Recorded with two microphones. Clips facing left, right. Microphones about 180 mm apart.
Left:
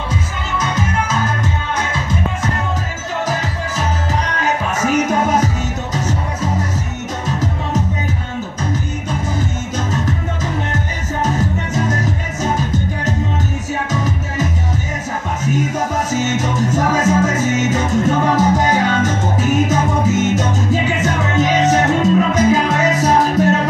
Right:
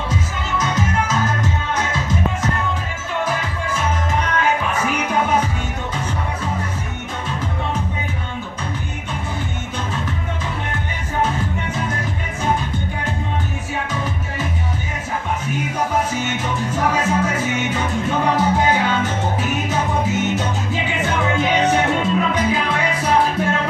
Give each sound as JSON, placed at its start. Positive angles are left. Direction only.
{"t": 3.3, "sound": "music", "side_deg": 40}
{"t": 9.9, "sound": "music", "side_deg": 40}